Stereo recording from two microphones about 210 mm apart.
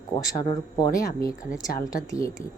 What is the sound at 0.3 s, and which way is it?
A woman's voice, 15° left (ahead or behind).